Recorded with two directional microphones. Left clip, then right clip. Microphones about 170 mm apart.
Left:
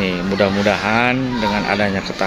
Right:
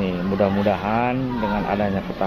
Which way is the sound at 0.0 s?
35° left (ahead or behind).